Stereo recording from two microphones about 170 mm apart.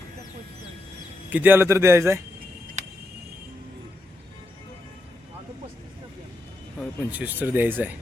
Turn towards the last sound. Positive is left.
turn(degrees=-10)  # may be behind; listen again after turning